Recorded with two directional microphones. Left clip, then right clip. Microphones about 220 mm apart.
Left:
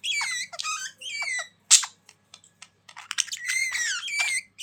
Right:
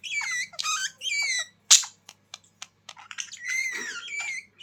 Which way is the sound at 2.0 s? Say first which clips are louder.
Right 6 dB; 25° right (ahead or behind).